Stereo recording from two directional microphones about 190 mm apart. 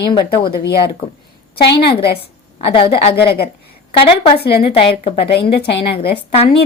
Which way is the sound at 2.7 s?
30° left (ahead or behind).